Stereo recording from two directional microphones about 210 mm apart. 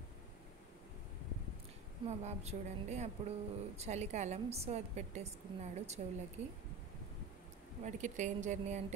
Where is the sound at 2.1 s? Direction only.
30° right (ahead or behind).